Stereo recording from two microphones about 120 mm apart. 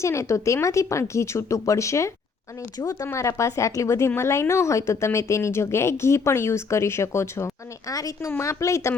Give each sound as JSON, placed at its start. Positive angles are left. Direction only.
{"t": 0.0, "sound": "speech", "side_deg": 25}